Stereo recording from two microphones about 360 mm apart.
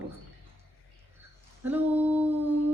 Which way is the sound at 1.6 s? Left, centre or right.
Centre.